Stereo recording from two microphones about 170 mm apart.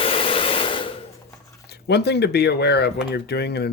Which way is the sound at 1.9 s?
75° left (ahead or behind).